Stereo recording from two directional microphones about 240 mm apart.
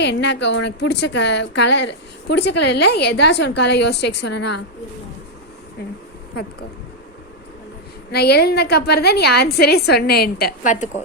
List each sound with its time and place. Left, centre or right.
0.0 s a woman's voice: left
8.1 s a woman's voice: left